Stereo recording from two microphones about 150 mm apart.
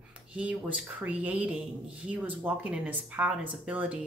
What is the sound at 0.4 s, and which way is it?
Speech, 10° right (ahead or behind).